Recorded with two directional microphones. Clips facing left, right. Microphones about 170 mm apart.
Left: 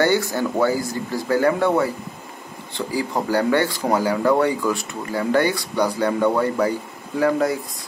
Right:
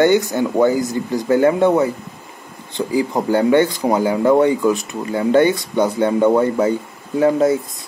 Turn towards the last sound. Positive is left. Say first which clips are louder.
# right 5 dB
turn(degrees=-25)  # may be behind; listen again after turning